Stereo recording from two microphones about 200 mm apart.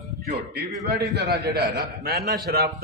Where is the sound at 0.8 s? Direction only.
55° right (ahead or behind).